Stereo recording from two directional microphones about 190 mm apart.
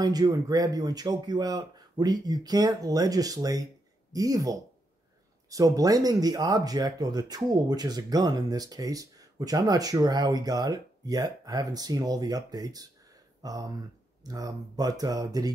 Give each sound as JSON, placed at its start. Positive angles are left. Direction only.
{"t": 0.0, "sound": "speech", "side_deg": -20}